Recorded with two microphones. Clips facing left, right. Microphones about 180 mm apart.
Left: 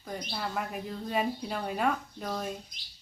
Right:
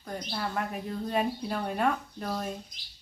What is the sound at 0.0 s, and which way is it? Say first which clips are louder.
Speech: right 2 dB; 5° left (ahead or behind).